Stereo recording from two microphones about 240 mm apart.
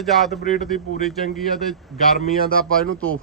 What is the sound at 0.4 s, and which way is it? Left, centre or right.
Speech, left.